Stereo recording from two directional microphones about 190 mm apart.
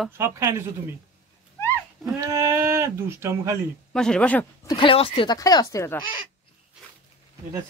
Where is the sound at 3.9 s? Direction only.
5° left (ahead or behind).